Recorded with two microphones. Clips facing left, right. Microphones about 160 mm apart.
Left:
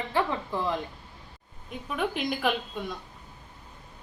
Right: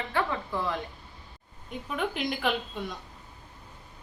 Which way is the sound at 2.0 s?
5° left (ahead or behind).